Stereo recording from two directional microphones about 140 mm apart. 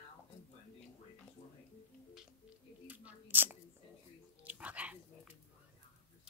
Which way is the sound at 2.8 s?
10° right (ahead or behind).